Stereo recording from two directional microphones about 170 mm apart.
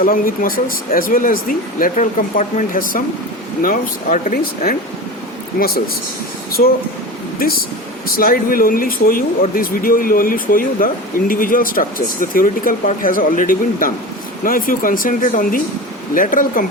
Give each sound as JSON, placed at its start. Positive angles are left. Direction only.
{"t": 0.0, "sound": "speech", "side_deg": 55}